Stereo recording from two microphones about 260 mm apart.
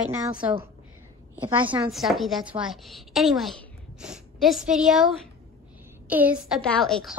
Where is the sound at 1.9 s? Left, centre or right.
Centre.